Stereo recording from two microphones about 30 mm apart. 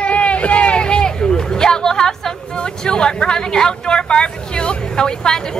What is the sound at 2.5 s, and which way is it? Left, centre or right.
Speech, left.